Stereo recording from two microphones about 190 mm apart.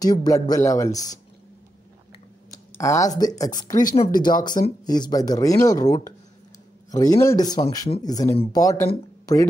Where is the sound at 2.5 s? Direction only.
15° left (ahead or behind).